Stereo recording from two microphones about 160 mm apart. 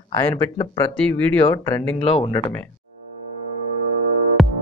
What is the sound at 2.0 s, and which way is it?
Speech, 35° left (ahead or behind).